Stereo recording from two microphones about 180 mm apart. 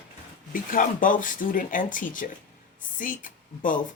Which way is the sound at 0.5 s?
50° left (ahead or behind).